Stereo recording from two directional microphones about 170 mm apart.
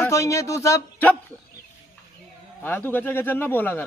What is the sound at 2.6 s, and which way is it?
A man's voice, 10° left (ahead or behind).